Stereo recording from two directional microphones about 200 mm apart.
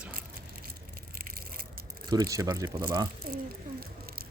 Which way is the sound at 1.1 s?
45° right (ahead or behind).